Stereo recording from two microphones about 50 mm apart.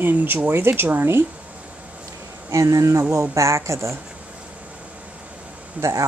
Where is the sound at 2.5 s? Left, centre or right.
Right.